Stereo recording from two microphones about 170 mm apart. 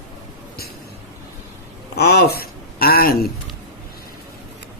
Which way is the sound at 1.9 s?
70° left (ahead or behind).